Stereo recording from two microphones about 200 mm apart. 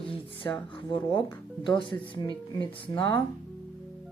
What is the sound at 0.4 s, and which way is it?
Speech, 15° left (ahead or behind).